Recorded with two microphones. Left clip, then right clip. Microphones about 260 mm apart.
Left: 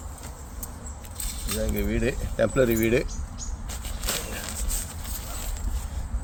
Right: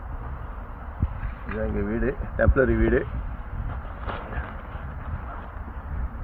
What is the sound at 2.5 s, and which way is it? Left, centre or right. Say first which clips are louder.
Speech: even; left.